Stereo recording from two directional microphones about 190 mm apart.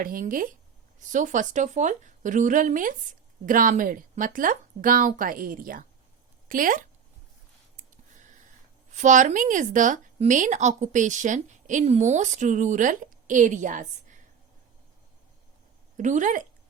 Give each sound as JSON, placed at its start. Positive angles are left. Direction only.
{"t": 0.0, "sound": "speech", "side_deg": -45}
{"t": 8.9, "sound": "a woman's voice", "side_deg": -40}
{"t": 16.0, "sound": "a woman's voice", "side_deg": -40}